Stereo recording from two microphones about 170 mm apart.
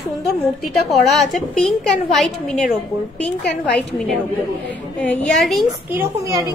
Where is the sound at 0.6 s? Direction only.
Centre (ahead or behind).